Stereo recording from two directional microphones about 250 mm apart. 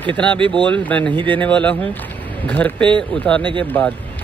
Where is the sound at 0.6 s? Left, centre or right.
Centre.